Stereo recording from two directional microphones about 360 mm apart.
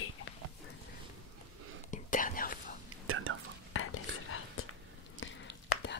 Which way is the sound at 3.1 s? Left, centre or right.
Right.